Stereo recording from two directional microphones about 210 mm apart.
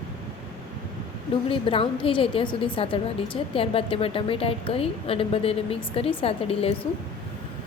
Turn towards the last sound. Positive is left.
turn(degrees=25)  # may be behind; listen again after turning